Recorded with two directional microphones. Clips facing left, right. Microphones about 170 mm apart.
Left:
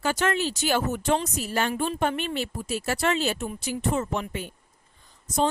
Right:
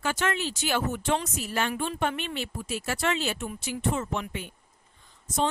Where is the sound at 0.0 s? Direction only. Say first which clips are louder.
Left 4 dB; 40° left (ahead or behind).